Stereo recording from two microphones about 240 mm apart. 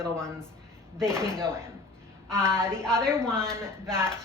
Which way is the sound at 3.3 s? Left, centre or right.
Centre.